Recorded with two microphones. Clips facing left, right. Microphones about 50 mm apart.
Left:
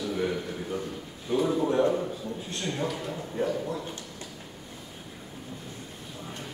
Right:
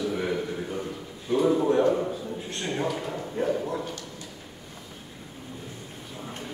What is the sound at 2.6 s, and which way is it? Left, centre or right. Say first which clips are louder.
Speech: right 2 dB; right.